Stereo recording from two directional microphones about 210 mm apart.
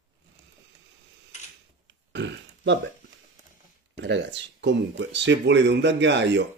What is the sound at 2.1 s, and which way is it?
Burping, 55° right (ahead or behind).